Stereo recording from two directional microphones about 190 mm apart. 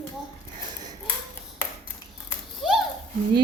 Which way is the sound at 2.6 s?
Centre (ahead or behind).